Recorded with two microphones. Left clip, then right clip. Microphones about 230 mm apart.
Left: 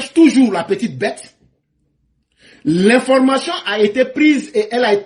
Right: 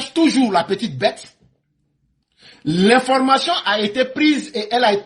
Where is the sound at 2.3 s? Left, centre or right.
Right.